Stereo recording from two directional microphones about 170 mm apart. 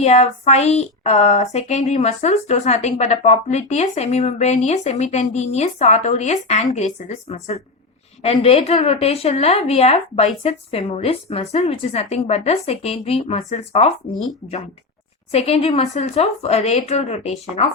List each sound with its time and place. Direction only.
0.0 s a woman's voice: 40° left (ahead or behind)
15.3 s a woman's voice: 35° left (ahead or behind)